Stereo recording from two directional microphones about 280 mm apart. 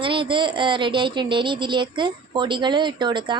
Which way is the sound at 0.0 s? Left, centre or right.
Centre.